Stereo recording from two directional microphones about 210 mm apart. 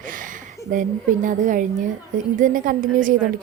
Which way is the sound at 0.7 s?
40° right (ahead or behind).